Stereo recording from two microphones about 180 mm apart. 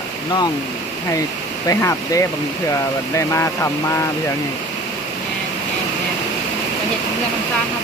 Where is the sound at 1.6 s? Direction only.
15° left (ahead or behind).